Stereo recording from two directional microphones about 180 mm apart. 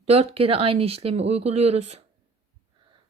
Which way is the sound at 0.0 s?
35° right (ahead or behind).